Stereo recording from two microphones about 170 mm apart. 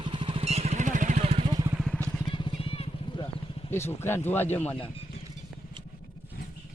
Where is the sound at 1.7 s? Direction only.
Centre (ahead or behind).